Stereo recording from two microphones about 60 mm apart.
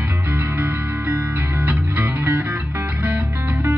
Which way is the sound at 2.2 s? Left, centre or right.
Right.